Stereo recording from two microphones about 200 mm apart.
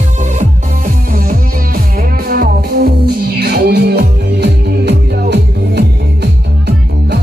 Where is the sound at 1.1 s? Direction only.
45° right (ahead or behind).